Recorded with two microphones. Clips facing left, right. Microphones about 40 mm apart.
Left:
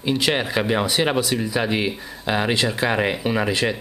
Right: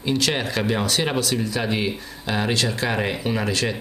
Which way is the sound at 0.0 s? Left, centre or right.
Centre.